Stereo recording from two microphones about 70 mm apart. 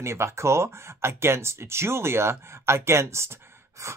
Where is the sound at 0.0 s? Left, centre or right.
Right.